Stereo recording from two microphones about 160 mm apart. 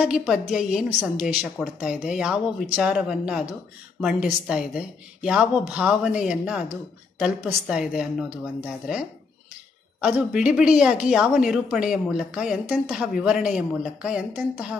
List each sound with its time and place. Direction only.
0.0 s a woman's voice: 5° right (ahead or behind)